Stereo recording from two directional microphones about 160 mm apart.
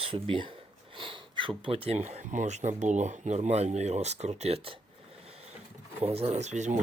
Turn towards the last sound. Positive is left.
turn(degrees=-45)  # may be behind; listen again after turning